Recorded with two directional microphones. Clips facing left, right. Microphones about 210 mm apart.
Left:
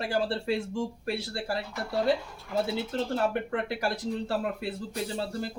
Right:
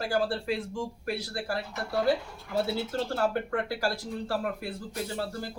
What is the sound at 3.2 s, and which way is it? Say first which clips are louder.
Speech: right 2 dB; 20° left (ahead or behind).